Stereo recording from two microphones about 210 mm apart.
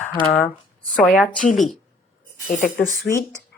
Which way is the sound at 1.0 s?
5° left (ahead or behind).